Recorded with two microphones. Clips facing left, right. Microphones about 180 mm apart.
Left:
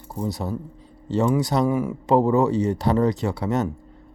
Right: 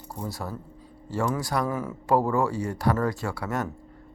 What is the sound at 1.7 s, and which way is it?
Speech, 10° left (ahead or behind).